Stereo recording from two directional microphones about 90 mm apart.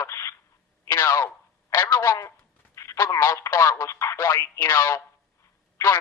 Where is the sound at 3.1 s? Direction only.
35° left (ahead or behind).